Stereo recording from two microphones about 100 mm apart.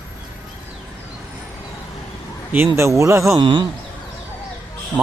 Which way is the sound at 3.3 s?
55° right (ahead or behind).